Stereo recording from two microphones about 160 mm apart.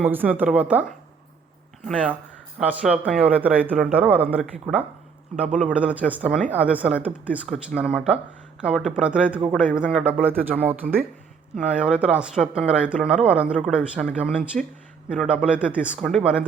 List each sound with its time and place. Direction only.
0.0 s speech: 10° right (ahead or behind)